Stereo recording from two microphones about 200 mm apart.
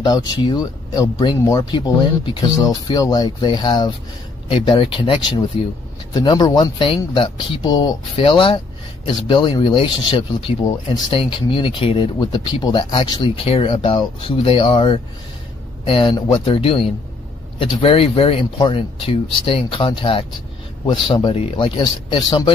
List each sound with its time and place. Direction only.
0.0 s speech: 20° left (ahead or behind)